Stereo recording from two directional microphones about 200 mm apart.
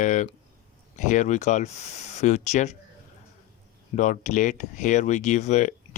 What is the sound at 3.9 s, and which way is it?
Speech, 35° left (ahead or behind).